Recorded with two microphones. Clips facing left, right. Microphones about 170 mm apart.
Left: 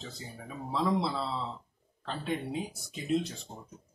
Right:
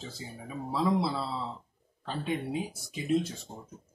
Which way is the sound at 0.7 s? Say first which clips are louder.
Right 1 dB; 5° right (ahead or behind).